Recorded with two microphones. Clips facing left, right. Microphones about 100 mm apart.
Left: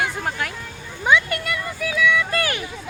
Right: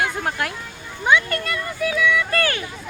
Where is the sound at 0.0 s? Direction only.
Centre (ahead or behind).